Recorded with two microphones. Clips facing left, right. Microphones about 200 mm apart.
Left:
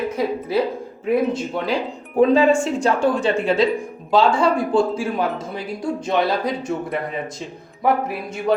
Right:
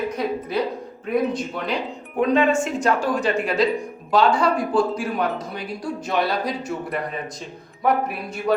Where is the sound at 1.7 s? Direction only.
30° left (ahead or behind).